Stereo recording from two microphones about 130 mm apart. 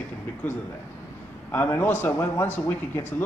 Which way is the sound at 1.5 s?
15° left (ahead or behind).